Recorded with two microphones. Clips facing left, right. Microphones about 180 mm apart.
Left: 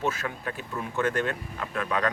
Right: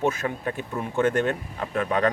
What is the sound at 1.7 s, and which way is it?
Speech, 40° right (ahead or behind).